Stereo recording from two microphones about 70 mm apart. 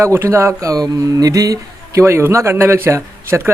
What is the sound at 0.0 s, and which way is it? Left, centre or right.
Speech, right.